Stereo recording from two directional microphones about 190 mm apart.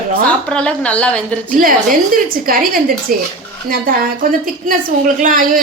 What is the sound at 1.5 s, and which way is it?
Speech, 50° right (ahead or behind).